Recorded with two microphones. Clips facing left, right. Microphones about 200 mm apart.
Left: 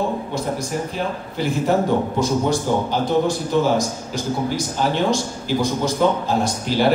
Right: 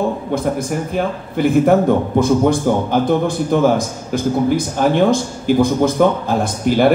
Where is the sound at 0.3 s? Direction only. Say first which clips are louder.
Right 5 dB; 55° right (ahead or behind).